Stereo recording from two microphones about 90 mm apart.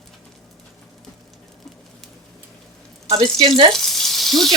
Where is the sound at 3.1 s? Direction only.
70° right (ahead or behind).